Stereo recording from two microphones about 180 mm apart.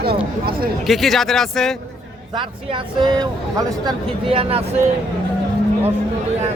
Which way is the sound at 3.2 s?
25° right (ahead or behind).